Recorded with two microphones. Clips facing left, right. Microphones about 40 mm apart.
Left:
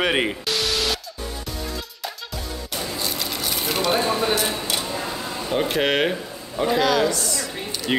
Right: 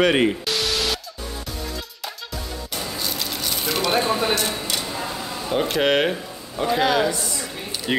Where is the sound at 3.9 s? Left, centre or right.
Centre.